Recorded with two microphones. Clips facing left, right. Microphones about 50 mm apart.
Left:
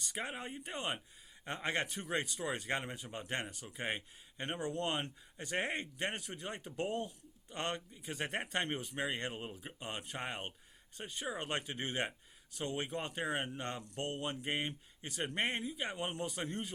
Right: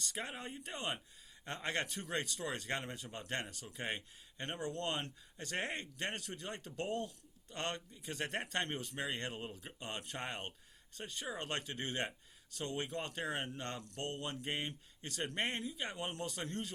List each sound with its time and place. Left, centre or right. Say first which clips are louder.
0.0 s speech: left 2 dB; centre